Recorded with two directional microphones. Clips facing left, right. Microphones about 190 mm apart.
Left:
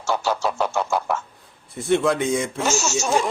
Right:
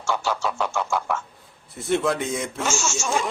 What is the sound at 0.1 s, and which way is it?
Speech, 35° left (ahead or behind).